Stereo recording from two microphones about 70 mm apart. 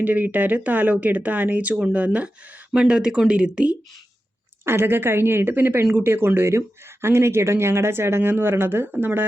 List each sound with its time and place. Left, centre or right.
0.0 s speech: right
4.6 s speech: right